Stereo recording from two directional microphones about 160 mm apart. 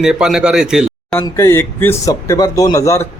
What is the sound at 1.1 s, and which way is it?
Speech, 15° left (ahead or behind).